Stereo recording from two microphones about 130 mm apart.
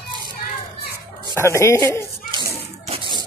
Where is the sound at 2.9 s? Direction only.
40° right (ahead or behind).